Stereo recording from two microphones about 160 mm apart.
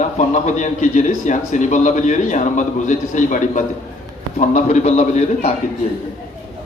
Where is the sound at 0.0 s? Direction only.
50° left (ahead or behind).